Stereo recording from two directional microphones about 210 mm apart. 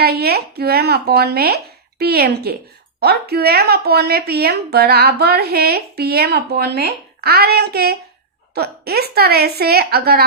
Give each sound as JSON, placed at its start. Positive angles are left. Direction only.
{"t": 0.0, "sound": "a woman's voice", "side_deg": -50}